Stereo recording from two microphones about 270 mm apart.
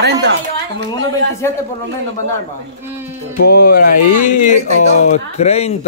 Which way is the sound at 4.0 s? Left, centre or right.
Left.